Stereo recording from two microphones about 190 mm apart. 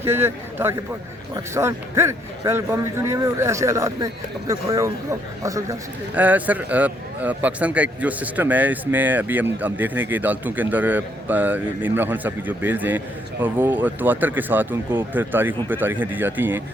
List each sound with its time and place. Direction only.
0.0 s a man's voice: 10° right (ahead or behind)